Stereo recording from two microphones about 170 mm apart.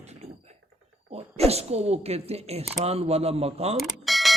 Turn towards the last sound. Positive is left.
turn(degrees=0)  # may be behind; listen again after turning